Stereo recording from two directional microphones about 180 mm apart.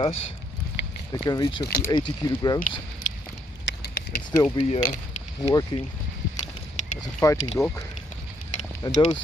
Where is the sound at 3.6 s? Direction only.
75° left (ahead or behind).